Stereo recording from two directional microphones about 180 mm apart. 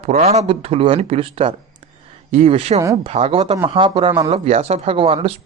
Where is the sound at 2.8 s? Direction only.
20° right (ahead or behind).